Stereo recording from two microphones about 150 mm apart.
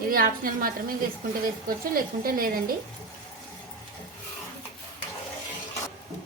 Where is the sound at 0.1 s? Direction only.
75° right (ahead or behind).